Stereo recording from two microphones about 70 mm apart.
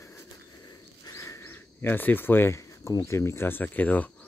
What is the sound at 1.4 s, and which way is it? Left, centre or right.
Insect, left.